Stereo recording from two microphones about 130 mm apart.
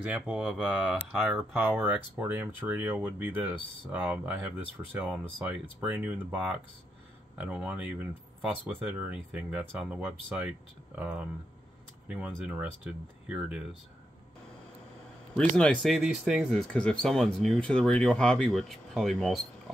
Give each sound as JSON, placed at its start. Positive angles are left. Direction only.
{"t": 0.0, "sound": "speech", "side_deg": -10}
{"t": 15.5, "sound": "speech", "side_deg": 5}
{"t": 16.0, "sound": "speech", "side_deg": -5}
{"t": 16.4, "sound": "speech", "side_deg": 5}